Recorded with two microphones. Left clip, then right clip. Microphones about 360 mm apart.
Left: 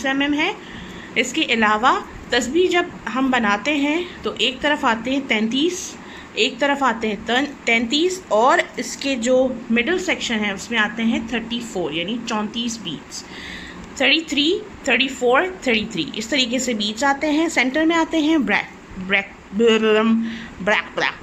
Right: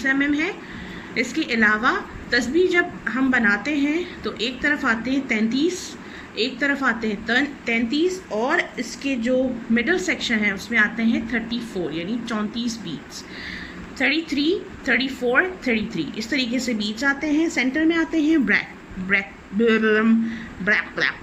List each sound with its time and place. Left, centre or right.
0.0 s a woman's voice: centre
8.3 s a woman's voice: left
8.8 s a woman's voice: centre
14.0 s a woman's voice: centre